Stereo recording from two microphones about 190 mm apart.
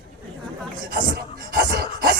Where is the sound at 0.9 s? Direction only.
55° right (ahead or behind).